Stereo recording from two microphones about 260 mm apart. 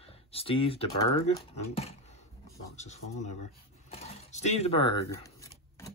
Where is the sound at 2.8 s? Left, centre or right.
Left.